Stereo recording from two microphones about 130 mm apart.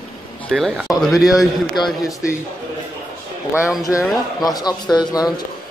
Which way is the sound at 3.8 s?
25° left (ahead or behind).